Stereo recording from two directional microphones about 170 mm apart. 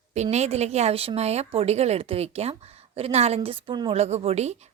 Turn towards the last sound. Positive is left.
turn(degrees=-40)  # may be behind; listen again after turning